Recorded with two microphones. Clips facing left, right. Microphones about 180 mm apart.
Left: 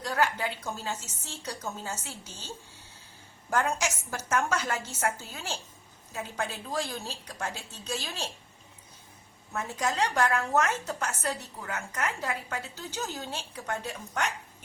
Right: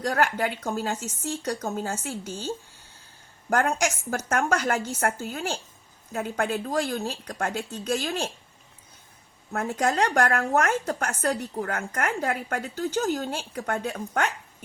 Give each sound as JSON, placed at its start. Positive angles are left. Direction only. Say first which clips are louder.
{"t": 0.0, "sound": "a woman's voice", "louder": "right 4 dB", "side_deg": -65}
{"t": 3.5, "sound": "a woman's voice", "louder": "right 4 dB", "side_deg": -55}
{"t": 9.5, "sound": "a woman's voice", "louder": "right 6 dB", "side_deg": -60}